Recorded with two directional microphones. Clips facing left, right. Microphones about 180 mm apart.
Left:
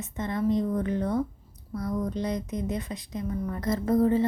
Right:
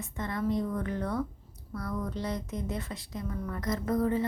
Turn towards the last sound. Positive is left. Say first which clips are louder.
# left 5 dB
turn(degrees=30)  # may be behind; listen again after turning